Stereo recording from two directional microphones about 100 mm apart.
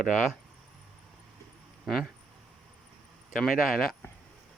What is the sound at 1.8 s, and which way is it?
Speech, 5° right (ahead or behind).